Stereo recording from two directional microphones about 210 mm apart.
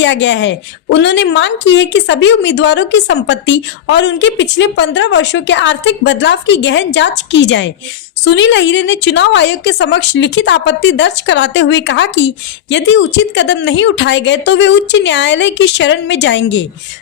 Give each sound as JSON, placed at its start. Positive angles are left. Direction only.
{"t": 0.0, "sound": "a woman's voice", "side_deg": 60}